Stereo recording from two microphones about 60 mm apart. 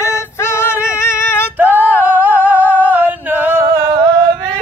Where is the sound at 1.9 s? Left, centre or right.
Left.